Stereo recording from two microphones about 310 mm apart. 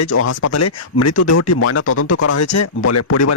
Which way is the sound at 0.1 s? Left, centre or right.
Left.